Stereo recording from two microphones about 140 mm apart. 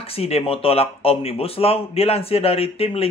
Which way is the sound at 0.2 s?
45° left (ahead or behind).